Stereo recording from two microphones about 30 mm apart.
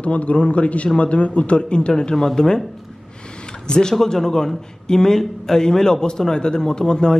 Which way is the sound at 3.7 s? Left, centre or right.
Left.